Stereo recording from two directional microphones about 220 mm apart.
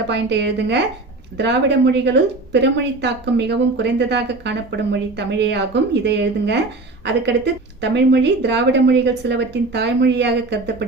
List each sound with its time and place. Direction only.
0.1 s speech: 50° right (ahead or behind)